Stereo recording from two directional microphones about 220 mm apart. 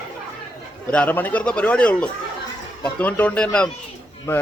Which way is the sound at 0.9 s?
5° left (ahead or behind).